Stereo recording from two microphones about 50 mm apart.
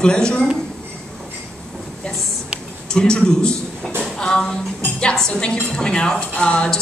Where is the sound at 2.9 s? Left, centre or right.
Centre.